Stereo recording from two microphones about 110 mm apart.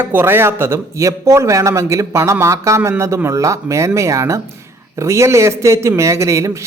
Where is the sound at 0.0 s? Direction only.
20° right (ahead or behind).